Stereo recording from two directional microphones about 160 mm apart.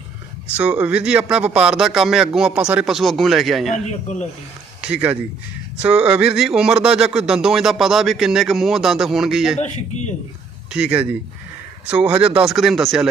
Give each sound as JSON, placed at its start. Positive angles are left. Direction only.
{"t": 0.5, "sound": "speech", "side_deg": -10}
{"t": 3.7, "sound": "a man's voice", "side_deg": 50}
{"t": 4.8, "sound": "speech", "side_deg": -10}
{"t": 10.7, "sound": "a man's voice", "side_deg": -5}